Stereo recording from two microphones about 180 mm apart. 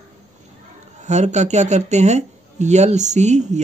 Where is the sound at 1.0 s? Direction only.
40° right (ahead or behind).